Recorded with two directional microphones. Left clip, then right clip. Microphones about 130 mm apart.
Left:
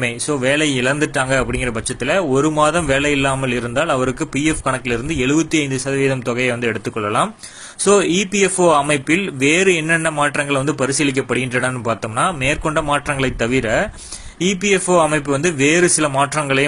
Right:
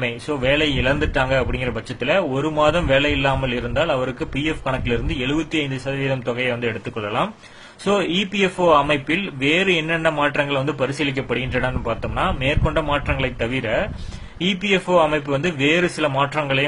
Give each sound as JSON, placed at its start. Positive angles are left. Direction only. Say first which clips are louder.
{"t": 0.0, "sound": "a man's voice", "louder": "left 3 dB", "side_deg": 30}